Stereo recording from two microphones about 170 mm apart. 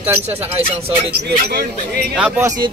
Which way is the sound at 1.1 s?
70° right (ahead or behind).